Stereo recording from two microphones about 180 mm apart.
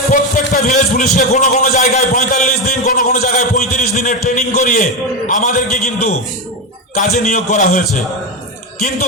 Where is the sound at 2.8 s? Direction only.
50° left (ahead or behind).